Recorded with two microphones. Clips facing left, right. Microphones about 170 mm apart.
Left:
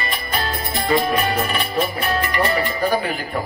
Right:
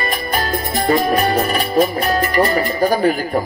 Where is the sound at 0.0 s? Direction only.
45° right (ahead or behind).